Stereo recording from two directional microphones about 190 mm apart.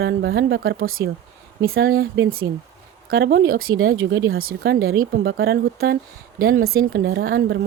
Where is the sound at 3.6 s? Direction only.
90° right.